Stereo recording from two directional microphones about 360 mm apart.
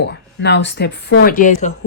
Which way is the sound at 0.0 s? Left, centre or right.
Left.